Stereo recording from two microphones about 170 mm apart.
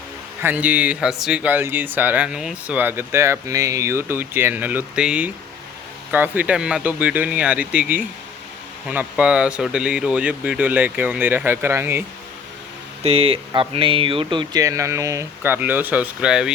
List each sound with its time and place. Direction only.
0.4 s speech: 10° right (ahead or behind)
13.0 s speech: 35° right (ahead or behind); by 16.5 s 5° right (ahead or behind)